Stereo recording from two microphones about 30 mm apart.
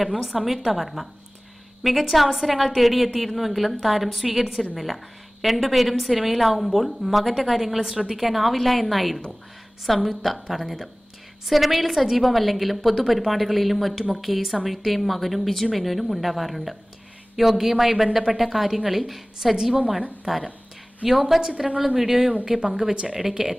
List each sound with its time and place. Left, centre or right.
0.2 s a woman's voice: centre
19.5 s a woman's voice: centre